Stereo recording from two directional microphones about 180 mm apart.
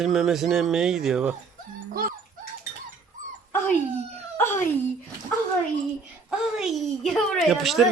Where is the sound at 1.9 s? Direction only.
55° right (ahead or behind).